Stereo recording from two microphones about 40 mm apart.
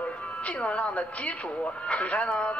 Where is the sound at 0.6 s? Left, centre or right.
Left.